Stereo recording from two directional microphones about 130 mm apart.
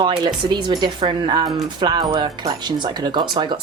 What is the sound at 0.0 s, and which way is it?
Speech, 35° right (ahead or behind).